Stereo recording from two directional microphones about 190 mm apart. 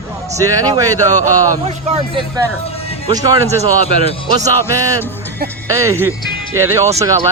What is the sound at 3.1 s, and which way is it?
Speech, 20° right (ahead or behind).